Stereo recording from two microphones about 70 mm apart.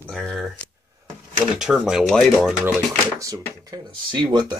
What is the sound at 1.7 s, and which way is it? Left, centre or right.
Speech, centre.